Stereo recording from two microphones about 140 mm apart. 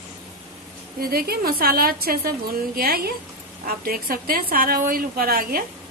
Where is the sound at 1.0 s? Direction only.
90° right.